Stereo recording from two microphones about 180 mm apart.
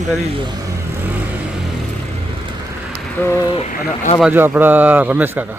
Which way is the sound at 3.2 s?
10° left (ahead or behind).